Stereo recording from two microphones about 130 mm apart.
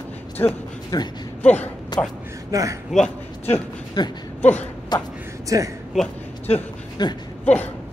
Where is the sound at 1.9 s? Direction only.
35° left (ahead or behind).